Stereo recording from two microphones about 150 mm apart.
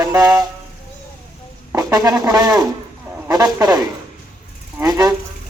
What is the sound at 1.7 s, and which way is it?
Music, 25° right (ahead or behind).